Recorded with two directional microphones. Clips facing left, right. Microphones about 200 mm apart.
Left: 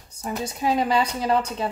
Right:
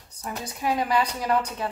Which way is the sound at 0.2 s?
25° left (ahead or behind).